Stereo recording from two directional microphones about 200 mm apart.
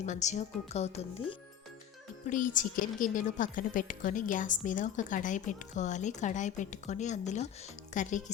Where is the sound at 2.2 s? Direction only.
40° left (ahead or behind).